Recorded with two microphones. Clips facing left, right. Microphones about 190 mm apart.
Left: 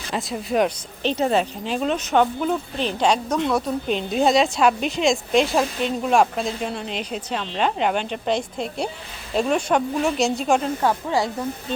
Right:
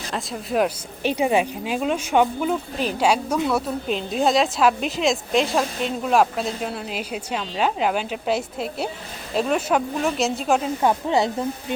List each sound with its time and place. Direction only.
0.1 s speech: centre (ahead or behind)
10.8 s speech: 20° right (ahead or behind)